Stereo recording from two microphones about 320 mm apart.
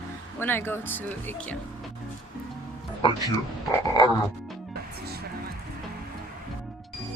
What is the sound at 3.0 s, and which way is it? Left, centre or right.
Speech, centre.